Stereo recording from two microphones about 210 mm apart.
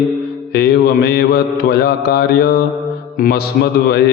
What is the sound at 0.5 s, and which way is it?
Mantra, 50° left (ahead or behind).